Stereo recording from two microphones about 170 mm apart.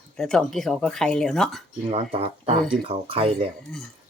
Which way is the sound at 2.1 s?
35° right (ahead or behind).